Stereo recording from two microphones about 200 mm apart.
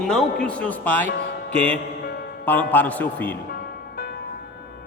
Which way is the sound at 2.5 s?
10° left (ahead or behind).